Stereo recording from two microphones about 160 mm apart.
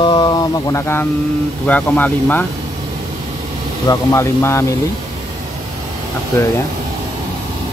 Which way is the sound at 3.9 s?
20° left (ahead or behind).